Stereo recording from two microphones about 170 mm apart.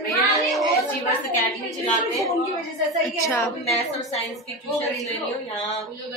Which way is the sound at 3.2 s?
15° left (ahead or behind).